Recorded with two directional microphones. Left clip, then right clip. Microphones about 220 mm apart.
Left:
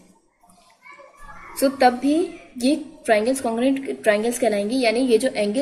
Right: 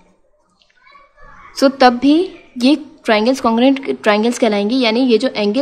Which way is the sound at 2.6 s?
50° right (ahead or behind).